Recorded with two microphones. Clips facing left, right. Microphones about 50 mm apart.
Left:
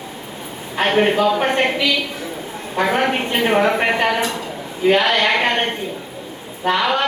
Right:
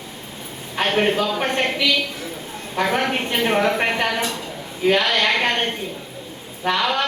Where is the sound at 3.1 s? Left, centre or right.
Left.